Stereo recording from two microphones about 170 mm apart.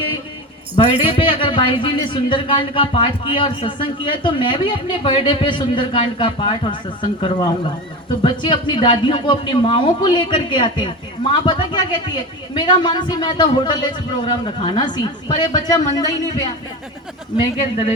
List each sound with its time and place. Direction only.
0.8 s speech: 35° left (ahead or behind)